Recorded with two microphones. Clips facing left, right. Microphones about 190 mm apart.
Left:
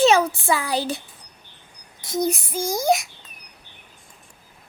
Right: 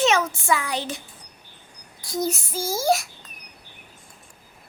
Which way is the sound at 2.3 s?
Centre (ahead or behind).